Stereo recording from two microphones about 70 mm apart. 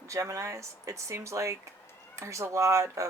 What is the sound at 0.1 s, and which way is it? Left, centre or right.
Speech, right.